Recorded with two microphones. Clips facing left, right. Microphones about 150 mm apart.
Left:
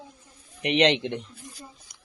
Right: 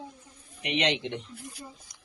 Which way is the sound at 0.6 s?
65° left (ahead or behind).